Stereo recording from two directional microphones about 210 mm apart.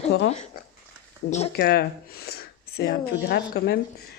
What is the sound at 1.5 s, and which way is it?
Speech, 50° left (ahead or behind).